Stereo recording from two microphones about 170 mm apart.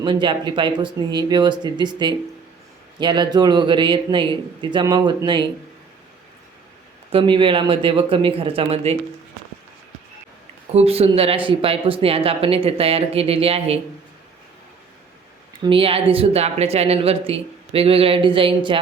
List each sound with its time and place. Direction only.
0.0 s a man's voice: 30° right (ahead or behind)
7.1 s speech: 30° right (ahead or behind)
10.7 s speech: 35° right (ahead or behind)
15.6 s speech: 35° right (ahead or behind)